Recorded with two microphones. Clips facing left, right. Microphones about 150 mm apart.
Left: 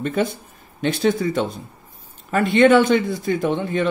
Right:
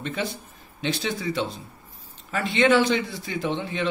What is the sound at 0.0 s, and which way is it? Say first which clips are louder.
Speech: left 8 dB; 50° left (ahead or behind).